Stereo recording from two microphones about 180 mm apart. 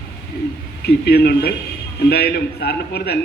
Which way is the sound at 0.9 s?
65° left (ahead or behind).